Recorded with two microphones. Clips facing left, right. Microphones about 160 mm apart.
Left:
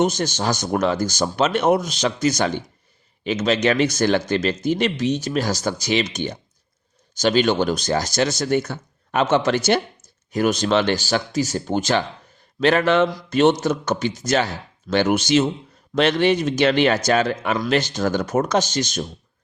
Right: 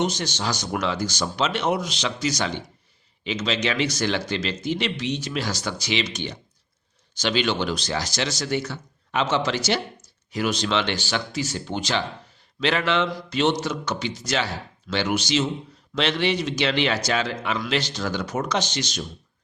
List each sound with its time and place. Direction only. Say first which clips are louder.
0.0 s speech: left 5 dB; 45° left (ahead or behind)